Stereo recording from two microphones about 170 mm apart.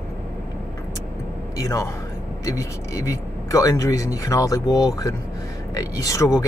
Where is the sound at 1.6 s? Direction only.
20° left (ahead or behind).